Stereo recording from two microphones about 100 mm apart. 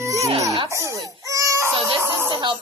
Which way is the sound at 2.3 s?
55° right (ahead or behind).